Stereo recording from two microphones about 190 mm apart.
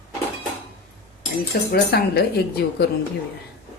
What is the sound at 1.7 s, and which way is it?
Speech, 55° left (ahead or behind).